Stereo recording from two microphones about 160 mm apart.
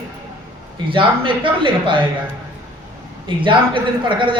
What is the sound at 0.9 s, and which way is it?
A man's voice, 30° right (ahead or behind).